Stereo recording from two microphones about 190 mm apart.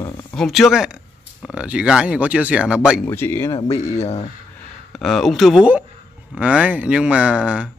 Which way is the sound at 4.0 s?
35° left (ahead or behind).